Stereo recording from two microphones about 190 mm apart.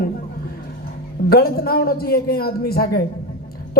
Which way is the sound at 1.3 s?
55° left (ahead or behind).